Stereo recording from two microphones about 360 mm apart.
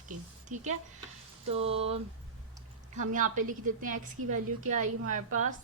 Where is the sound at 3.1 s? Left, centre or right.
Right.